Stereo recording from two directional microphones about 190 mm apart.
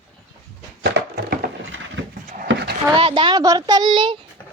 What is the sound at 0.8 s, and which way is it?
Wood, 55° right (ahead or behind).